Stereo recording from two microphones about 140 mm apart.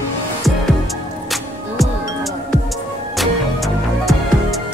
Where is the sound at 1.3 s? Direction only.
Centre (ahead or behind).